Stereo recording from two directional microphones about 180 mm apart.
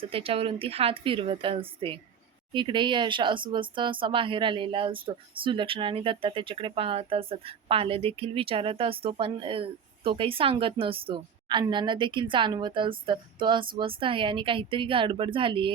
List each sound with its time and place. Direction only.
0.1 s speech: 30° right (ahead or behind)